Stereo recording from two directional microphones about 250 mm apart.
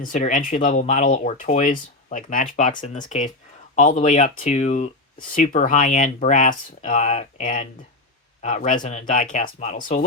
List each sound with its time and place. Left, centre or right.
0.0 s speech: left